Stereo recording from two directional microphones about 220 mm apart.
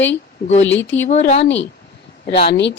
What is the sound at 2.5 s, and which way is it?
Speech, 50° left (ahead or behind).